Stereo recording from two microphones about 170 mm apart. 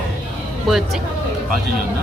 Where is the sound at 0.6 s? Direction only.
Centre (ahead or behind).